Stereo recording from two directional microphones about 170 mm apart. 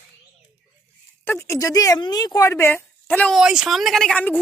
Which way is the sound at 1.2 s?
15° left (ahead or behind).